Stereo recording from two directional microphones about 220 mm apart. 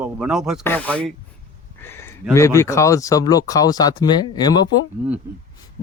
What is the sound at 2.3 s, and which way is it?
Speech, 15° left (ahead or behind).